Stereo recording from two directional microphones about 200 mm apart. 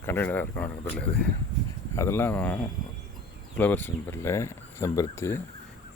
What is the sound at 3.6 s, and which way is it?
Speech, 10° left (ahead or behind).